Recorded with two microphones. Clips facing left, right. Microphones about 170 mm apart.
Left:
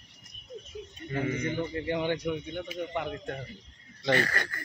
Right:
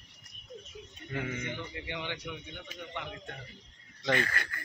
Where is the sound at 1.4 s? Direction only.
45° left (ahead or behind).